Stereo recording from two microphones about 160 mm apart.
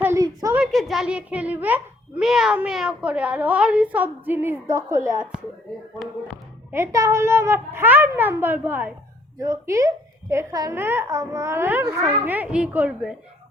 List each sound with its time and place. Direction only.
0.0 s a sound: 15° right (ahead or behind)
0.7 s a child's voice: centre (ahead or behind); by 5.3 s 20° right (ahead or behind)
6.7 s a child's voice: 15° right (ahead or behind)